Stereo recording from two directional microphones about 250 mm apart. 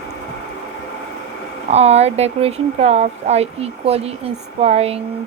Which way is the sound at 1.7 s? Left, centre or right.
Right.